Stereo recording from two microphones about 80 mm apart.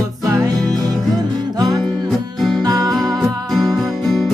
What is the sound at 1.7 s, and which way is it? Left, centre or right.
Music, centre.